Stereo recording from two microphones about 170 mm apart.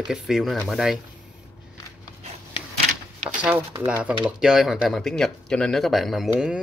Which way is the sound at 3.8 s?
10° right (ahead or behind).